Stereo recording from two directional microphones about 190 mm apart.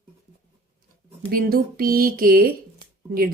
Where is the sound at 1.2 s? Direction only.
50° right (ahead or behind).